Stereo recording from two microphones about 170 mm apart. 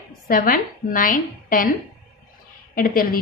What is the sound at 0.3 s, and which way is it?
A woman's voice, 55° left (ahead or behind).